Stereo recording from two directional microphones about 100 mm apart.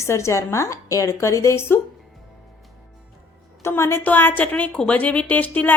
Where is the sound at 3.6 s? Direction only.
25° left (ahead or behind).